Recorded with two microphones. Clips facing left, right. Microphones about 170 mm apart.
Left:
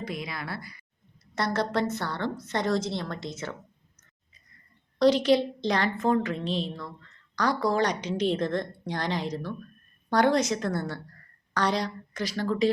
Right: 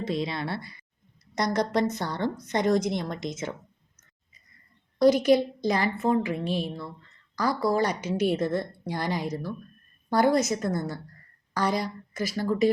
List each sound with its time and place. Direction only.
0.0 s a woman's voice: 25° right (ahead or behind)
4.9 s a woman's voice: 10° right (ahead or behind)